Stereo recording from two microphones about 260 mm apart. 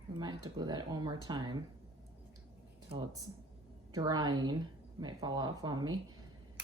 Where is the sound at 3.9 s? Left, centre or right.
Centre.